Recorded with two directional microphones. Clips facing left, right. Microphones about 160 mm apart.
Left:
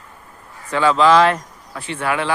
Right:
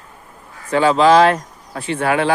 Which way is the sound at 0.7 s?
35° right (ahead or behind).